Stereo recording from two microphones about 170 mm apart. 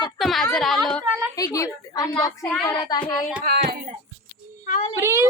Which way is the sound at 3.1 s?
10° left (ahead or behind).